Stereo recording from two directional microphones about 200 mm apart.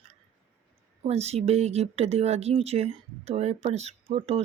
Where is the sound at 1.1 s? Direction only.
30° right (ahead or behind).